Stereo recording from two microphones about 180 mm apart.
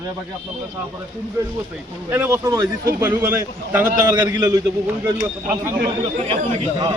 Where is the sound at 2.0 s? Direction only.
15° right (ahead or behind).